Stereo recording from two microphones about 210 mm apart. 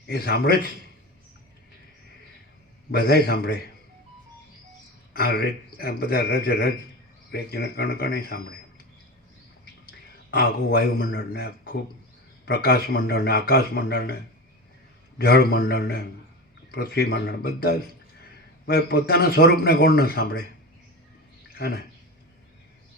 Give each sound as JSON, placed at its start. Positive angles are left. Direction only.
{"t": 0.1, "sound": "a man's voice", "side_deg": 45}
{"t": 2.9, "sound": "a man's voice", "side_deg": 45}
{"t": 5.1, "sound": "a man's voice", "side_deg": 45}
{"t": 10.3, "sound": "a man's voice", "side_deg": 45}
{"t": 15.2, "sound": "a man's voice", "side_deg": 50}
{"t": 21.5, "sound": "speech", "side_deg": 50}